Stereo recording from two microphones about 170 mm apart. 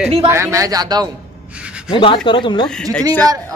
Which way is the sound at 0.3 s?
15° right (ahead or behind).